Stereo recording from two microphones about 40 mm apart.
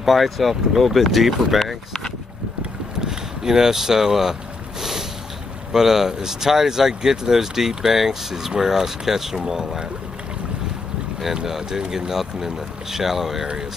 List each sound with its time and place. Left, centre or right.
0.0 s speech: centre
3.0 s speech: centre
5.7 s speech: centre
11.3 s speech: centre